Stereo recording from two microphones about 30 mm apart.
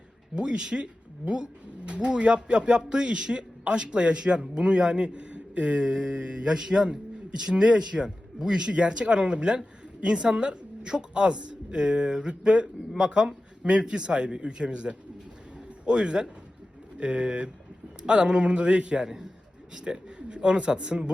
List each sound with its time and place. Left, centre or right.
0.3 s a man's voice: right
5.8 s a man's voice: right
8.7 s a man's voice: right